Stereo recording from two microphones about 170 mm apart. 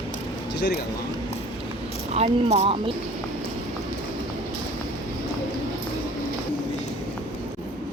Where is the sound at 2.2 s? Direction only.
35° right (ahead or behind).